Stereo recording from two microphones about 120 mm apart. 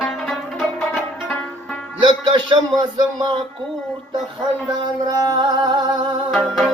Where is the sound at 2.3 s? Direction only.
40° right (ahead or behind).